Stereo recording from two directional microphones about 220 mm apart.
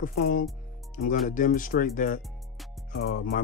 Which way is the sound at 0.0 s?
40° left (ahead or behind).